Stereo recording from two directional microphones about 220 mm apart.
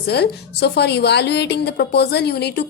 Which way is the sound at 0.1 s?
50° left (ahead or behind).